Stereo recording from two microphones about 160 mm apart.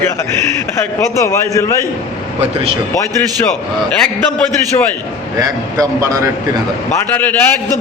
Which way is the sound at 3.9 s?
10° left (ahead or behind).